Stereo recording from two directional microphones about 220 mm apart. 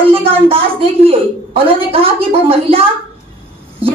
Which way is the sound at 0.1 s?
25° right (ahead or behind).